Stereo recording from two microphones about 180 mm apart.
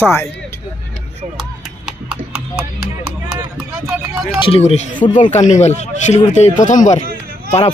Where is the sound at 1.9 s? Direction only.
5° right (ahead or behind).